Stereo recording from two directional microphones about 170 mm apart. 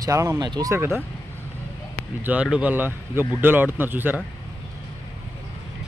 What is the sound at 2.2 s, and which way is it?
Speech, 5° right (ahead or behind).